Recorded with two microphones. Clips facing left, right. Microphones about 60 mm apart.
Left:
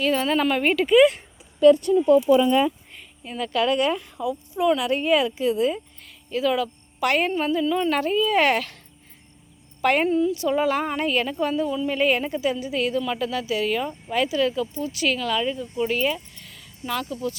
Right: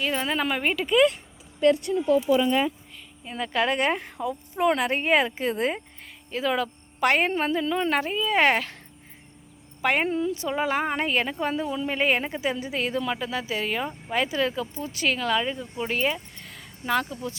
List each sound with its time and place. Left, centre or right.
0.0 s speech: centre
0.7 s speech: centre
3.3 s a woman's voice: right
9.8 s speech: centre
10.1 s a woman's voice: right